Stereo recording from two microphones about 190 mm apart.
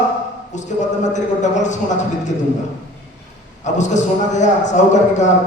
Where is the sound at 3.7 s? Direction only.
40° left (ahead or behind).